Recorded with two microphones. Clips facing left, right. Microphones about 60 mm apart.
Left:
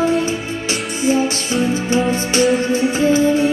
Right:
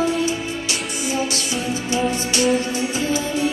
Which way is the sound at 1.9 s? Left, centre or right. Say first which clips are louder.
Left 3 dB; left.